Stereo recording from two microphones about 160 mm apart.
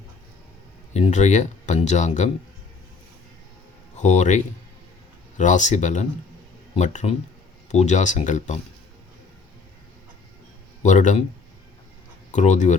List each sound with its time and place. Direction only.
0.9 s speech: 45° left (ahead or behind)
3.9 s speech: 45° left (ahead or behind)
5.4 s speech: 50° left (ahead or behind)
10.8 s speech: 50° left (ahead or behind)
12.3 s speech: 50° left (ahead or behind)